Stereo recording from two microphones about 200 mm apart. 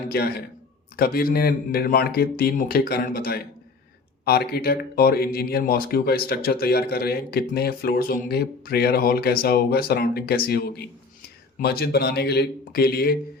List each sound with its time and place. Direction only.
0.1 s speech: 50° left (ahead or behind)